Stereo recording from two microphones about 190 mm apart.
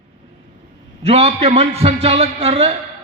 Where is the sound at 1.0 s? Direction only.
30° right (ahead or behind).